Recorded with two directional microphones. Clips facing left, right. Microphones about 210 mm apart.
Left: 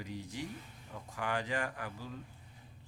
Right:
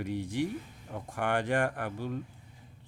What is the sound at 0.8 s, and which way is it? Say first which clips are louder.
Speech: right 6 dB; 50° right (ahead or behind).